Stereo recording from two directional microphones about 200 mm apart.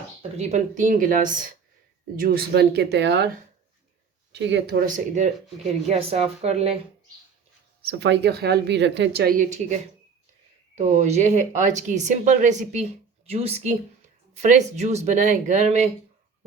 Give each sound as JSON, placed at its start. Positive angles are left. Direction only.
{"t": 0.2, "sound": "speech", "side_deg": -35}
{"t": 4.3, "sound": "a woman's voice", "side_deg": -60}
{"t": 7.8, "sound": "a woman's voice", "side_deg": -55}
{"t": 10.8, "sound": "speech", "side_deg": -35}